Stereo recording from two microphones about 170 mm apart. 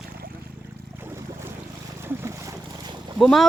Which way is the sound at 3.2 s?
Centre (ahead or behind).